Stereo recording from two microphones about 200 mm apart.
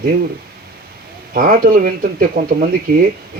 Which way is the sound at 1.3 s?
45° right (ahead or behind).